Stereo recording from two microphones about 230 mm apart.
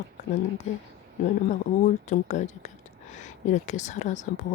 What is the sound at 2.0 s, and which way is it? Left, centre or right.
Speech, left.